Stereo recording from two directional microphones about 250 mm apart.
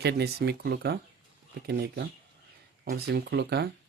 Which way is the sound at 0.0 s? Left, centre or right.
Right.